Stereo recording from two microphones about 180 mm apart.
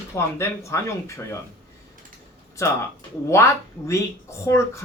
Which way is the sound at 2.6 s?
15° left (ahead or behind).